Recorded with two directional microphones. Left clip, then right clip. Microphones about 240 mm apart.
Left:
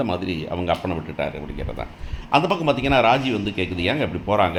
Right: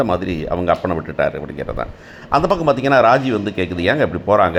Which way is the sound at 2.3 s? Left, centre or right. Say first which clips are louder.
Right 4 dB; centre.